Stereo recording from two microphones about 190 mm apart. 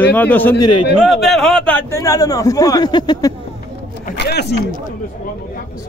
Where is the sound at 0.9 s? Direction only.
Centre (ahead or behind); by 3.3 s 20° left (ahead or behind).